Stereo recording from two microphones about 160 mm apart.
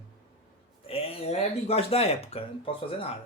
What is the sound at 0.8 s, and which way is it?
Speech, 35° left (ahead or behind).